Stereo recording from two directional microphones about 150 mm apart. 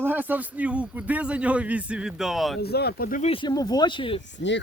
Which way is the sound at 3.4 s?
25° left (ahead or behind).